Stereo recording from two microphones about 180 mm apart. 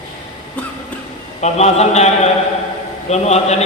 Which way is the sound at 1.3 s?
40° left (ahead or behind).